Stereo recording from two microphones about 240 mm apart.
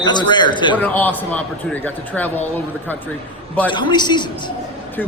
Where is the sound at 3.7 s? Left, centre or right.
Centre.